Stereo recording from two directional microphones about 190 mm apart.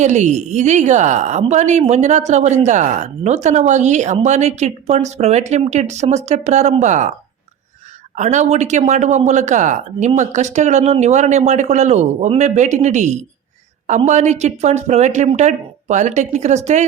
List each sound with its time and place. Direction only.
0.0 s a woman's voice: 40° right (ahead or behind)
8.1 s a woman's voice: 40° right (ahead or behind)